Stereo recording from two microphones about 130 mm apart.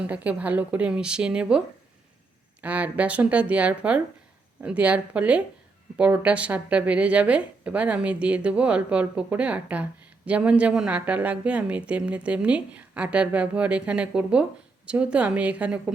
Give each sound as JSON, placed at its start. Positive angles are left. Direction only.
{"t": 0.0, "sound": "a woman's voice", "side_deg": -10}